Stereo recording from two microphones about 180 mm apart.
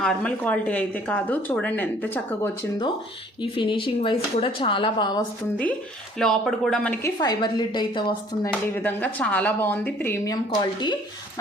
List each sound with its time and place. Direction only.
0.0 s speech: 5° left (ahead or behind)
3.4 s speech: 30° left (ahead or behind)
6.1 s speech: centre (ahead or behind)
7.2 s speech: 25° left (ahead or behind)
8.7 s speech: 10° left (ahead or behind)